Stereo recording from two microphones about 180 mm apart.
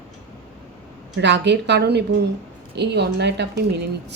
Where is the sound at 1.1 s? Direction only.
75° right (ahead or behind).